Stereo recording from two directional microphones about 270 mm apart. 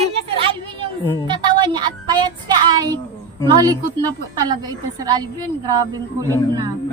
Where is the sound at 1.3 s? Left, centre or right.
Centre.